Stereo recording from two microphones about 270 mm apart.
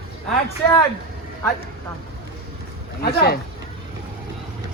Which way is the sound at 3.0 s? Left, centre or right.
Left.